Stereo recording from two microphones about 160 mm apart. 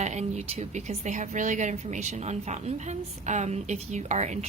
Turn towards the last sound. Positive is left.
turn(degrees=-45)  # may be behind; listen again after turning